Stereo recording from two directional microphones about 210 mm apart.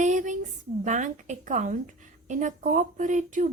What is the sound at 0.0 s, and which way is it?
A woman's voice, 35° right (ahead or behind).